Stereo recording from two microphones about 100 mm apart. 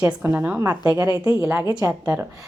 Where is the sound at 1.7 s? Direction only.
35° right (ahead or behind).